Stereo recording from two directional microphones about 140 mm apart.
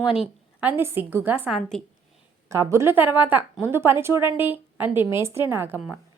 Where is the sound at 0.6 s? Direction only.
15° right (ahead or behind).